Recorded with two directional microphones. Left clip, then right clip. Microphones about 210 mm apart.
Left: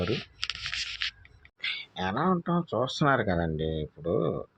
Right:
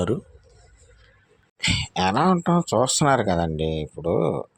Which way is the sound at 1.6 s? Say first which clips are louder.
Right 9 dB; 35° right (ahead or behind).